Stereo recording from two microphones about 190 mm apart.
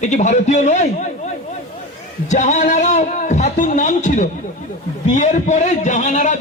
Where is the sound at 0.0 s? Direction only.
40° left (ahead or behind).